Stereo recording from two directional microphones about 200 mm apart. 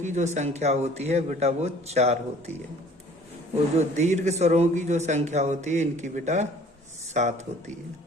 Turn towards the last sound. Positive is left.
turn(degrees=-35)  # may be behind; listen again after turning